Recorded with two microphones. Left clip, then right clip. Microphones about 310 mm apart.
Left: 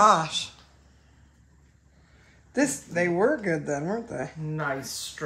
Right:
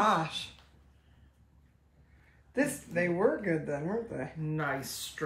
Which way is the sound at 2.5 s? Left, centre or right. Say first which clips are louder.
Left 5 dB; left.